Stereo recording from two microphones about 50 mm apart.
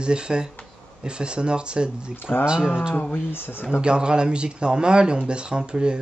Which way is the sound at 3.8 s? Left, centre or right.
Centre.